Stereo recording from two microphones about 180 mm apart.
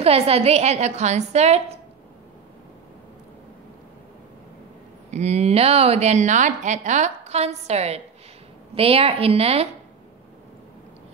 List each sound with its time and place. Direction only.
0.0 s speech: 35° right (ahead or behind)
5.1 s speech: 35° right (ahead or behind)